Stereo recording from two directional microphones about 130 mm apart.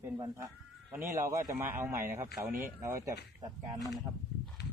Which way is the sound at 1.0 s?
20° right (ahead or behind).